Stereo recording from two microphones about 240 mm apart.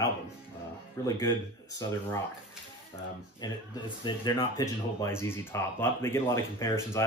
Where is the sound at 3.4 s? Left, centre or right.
Centre.